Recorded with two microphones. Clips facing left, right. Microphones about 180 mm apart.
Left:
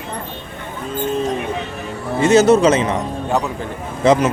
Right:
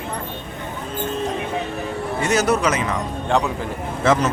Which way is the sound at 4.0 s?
15° left (ahead or behind).